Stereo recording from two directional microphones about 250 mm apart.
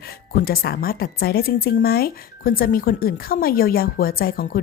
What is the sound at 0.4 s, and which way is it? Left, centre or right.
Speech, left.